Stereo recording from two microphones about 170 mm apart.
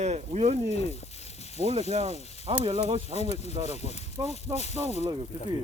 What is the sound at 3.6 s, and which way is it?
Speech, 40° left (ahead or behind).